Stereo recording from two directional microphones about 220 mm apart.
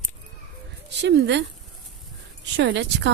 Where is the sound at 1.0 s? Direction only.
50° right (ahead or behind).